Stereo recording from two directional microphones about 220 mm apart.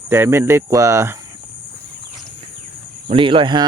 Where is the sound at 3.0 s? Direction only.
25° right (ahead or behind).